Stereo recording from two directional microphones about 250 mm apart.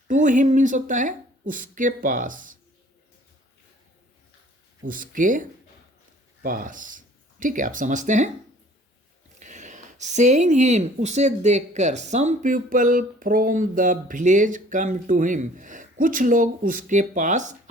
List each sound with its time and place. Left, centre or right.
0.1 s speech: right
4.9 s speech: right
9.4 s speech: right